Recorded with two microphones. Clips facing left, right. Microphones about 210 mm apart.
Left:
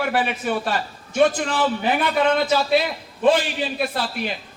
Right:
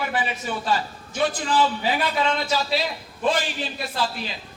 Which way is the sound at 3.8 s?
60° left (ahead or behind).